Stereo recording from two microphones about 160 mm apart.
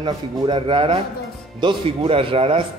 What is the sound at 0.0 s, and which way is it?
A man's voice, 30° right (ahead or behind).